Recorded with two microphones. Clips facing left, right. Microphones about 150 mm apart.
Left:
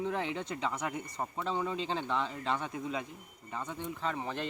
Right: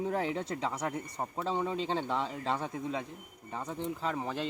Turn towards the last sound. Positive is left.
turn(degrees=-5)  # may be behind; listen again after turning